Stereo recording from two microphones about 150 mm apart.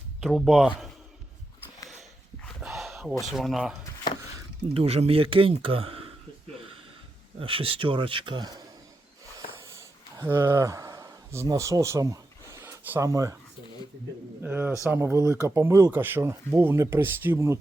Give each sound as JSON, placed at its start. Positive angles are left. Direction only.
{"t": 0.2, "sound": "speech", "side_deg": 0}
{"t": 2.6, "sound": "a sound", "side_deg": 0}
{"t": 3.3, "sound": "speech", "side_deg": 0}
{"t": 4.7, "sound": "speech", "side_deg": -40}
{"t": 7.3, "sound": "speech", "side_deg": -35}
{"t": 10.2, "sound": "speech", "side_deg": -15}
{"t": 14.4, "sound": "speech", "side_deg": -10}